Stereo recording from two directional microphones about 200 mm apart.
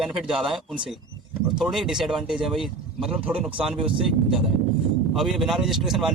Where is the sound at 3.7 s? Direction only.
25° right (ahead or behind).